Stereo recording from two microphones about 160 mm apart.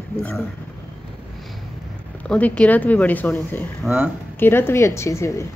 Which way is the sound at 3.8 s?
10° right (ahead or behind).